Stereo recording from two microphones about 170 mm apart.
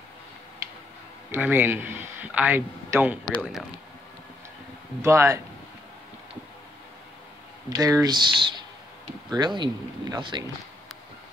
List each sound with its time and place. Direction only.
1.3 s speech: 10° right (ahead or behind)
5.0 s speech: 15° right (ahead or behind)
7.7 s speech: 20° right (ahead or behind)